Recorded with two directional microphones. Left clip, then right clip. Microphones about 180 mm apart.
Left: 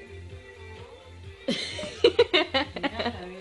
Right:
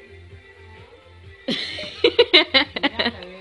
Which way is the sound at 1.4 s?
35° right (ahead or behind).